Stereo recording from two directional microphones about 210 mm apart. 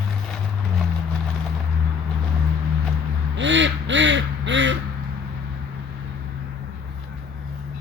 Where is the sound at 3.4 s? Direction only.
60° right (ahead or behind).